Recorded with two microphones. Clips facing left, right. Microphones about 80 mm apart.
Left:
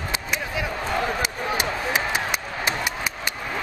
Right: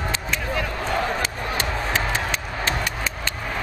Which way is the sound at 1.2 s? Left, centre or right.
Centre.